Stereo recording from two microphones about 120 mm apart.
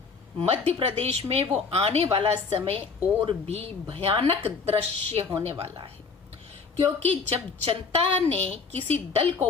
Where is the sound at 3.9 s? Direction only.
50° right (ahead or behind).